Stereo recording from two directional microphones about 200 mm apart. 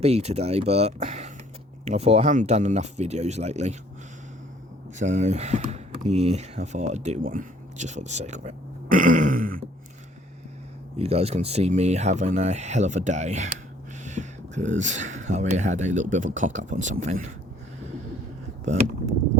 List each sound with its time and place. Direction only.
0.0 s speech: 35° right (ahead or behind)
4.9 s speech: 35° right (ahead or behind)
10.9 s speech: 30° right (ahead or behind)
18.6 s speech: 35° right (ahead or behind)